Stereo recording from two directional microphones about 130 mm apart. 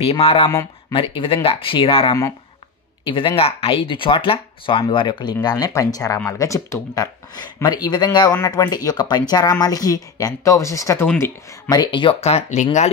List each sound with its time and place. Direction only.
0.1 s speech: 45° left (ahead or behind)
0.5 s speech: 25° left (ahead or behind)
0.9 s speech: 40° left (ahead or behind); by 11.7 s 15° left (ahead or behind)
11.7 s speech: 35° left (ahead or behind)
12.2 s speech: 55° left (ahead or behind)